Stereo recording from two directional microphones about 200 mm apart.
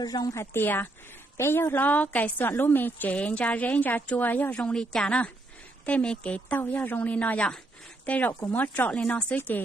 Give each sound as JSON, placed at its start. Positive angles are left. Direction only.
{"t": 0.0, "sound": "a woman's voice", "side_deg": 20}